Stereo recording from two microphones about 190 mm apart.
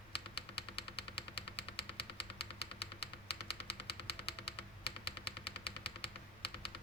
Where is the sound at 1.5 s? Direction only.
30° left (ahead or behind).